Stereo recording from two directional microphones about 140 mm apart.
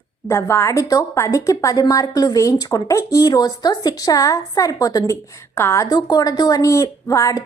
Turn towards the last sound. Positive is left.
turn(degrees=25)  # may be behind; listen again after turning